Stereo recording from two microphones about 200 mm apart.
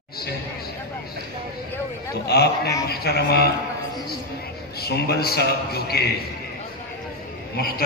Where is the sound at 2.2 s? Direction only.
55° left (ahead or behind).